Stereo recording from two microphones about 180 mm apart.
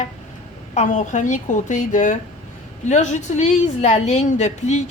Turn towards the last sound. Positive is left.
turn(degrees=40)  # may be behind; listen again after turning